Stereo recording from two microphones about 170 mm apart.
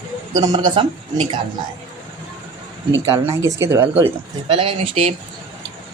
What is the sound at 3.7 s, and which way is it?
Speech, 15° right (ahead or behind).